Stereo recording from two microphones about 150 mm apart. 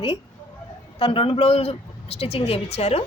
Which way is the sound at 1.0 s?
40° left (ahead or behind).